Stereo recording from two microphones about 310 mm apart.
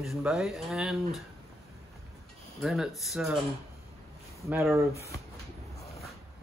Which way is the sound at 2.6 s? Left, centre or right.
Centre.